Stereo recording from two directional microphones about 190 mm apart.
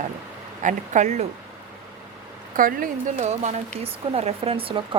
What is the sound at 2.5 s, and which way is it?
Speech, 45° right (ahead or behind).